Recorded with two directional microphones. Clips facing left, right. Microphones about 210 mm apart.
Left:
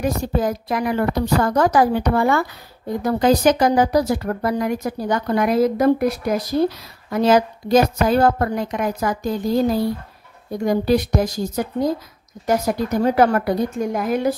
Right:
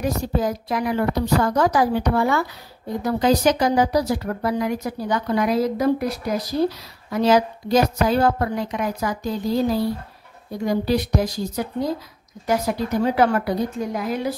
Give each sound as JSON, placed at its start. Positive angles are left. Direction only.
{"t": 0.0, "sound": "speech", "side_deg": 55}